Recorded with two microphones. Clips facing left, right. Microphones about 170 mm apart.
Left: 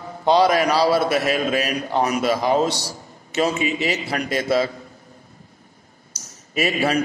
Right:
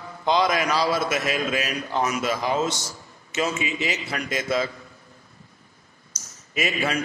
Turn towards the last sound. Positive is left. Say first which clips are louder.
# left 5 dB
turn(degrees=35)  # may be behind; listen again after turning